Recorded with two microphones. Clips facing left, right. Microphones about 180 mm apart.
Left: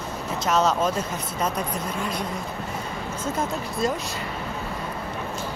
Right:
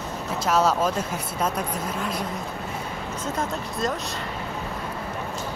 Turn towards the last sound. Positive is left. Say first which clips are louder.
# left 2 dB
turn(degrees=0)  # may be behind; listen again after turning